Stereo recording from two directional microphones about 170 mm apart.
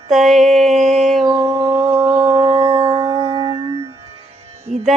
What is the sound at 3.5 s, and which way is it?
Music, 25° right (ahead or behind).